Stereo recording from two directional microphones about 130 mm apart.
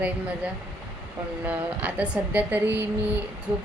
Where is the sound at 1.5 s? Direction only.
10° right (ahead or behind).